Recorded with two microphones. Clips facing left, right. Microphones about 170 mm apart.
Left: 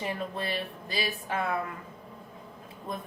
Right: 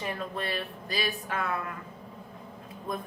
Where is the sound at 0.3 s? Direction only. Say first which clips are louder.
Even; 25° left (ahead or behind).